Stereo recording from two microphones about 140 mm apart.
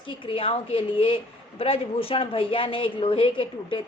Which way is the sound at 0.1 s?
40° left (ahead or behind).